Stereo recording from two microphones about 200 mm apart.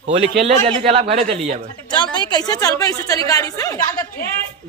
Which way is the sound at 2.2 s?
20° left (ahead or behind).